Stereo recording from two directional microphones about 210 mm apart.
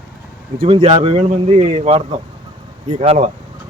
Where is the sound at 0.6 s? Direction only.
25° right (ahead or behind).